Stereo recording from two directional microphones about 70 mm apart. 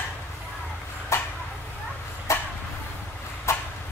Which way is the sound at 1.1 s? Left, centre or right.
Left.